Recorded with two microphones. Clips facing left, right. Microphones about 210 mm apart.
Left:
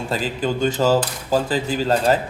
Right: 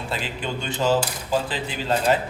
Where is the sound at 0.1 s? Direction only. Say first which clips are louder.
Left 7 dB; 40° left (ahead or behind).